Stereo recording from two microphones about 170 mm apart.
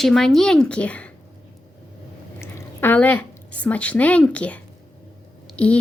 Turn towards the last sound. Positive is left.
turn(degrees=5)  # may be behind; listen again after turning